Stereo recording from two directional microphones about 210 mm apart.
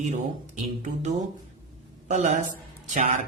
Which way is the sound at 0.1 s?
35° right (ahead or behind).